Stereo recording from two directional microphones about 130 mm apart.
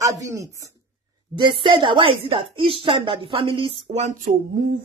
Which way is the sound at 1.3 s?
35° right (ahead or behind).